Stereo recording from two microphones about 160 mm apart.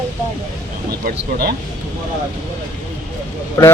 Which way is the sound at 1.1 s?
70° right (ahead or behind).